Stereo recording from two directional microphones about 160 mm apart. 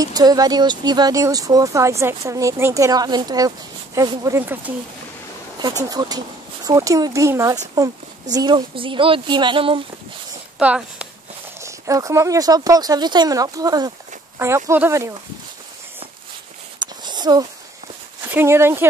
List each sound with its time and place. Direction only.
0.0 s speech: 25° right (ahead or behind)
5.9 s speech: 25° right (ahead or behind)
10.6 s speech: 10° right (ahead or behind)
11.6 s speech: 20° right (ahead or behind)
16.8 s a sound: 25° right (ahead or behind)
18.3 s speech: 15° right (ahead or behind)